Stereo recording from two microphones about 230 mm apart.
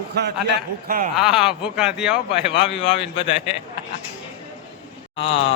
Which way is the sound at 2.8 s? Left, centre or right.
Left.